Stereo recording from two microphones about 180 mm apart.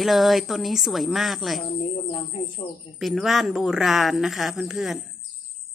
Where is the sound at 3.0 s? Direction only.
Centre (ahead or behind).